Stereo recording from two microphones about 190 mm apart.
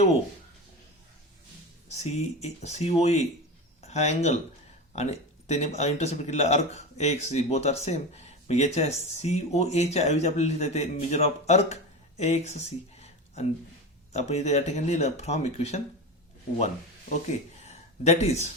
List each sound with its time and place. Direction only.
2.0 s speech: 35° left (ahead or behind)
13.0 s a sound: 35° left (ahead or behind)
14.1 s speech: 35° left (ahead or behind)
17.1 s speech: 40° left (ahead or behind)